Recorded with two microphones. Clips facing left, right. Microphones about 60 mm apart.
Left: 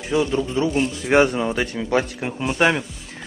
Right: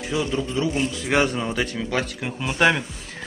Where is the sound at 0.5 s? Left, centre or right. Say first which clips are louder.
Left 3 dB; left.